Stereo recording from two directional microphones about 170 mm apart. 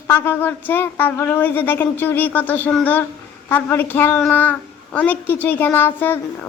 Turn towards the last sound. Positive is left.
turn(degrees=10)  # may be behind; listen again after turning